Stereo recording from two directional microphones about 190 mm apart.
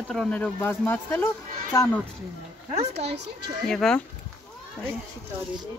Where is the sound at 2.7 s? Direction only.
35° right (ahead or behind).